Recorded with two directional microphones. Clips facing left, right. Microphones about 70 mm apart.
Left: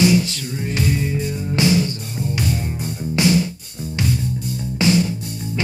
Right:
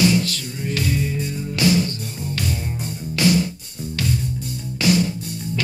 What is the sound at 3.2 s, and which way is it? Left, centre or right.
Music, left.